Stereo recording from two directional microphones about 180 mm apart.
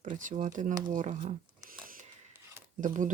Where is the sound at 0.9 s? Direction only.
45° right (ahead or behind).